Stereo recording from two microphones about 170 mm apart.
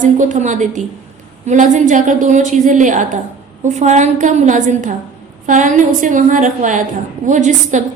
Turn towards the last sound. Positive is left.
turn(degrees=-45)  # may be behind; listen again after turning